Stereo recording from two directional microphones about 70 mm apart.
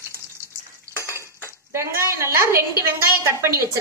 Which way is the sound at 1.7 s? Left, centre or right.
Right.